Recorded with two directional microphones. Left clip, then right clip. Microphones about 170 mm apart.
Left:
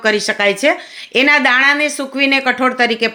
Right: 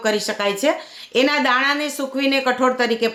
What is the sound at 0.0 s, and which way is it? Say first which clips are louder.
Speech: left 6 dB; 15° left (ahead or behind).